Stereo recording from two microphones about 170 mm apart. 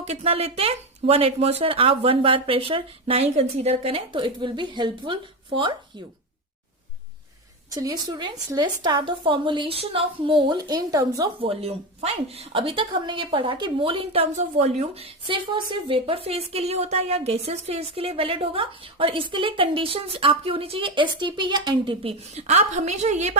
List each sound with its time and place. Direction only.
0.0 s a woman's voice: 40° right (ahead or behind)
7.7 s a woman's voice: 20° right (ahead or behind)
11.3 s a woman's voice: 35° right (ahead or behind)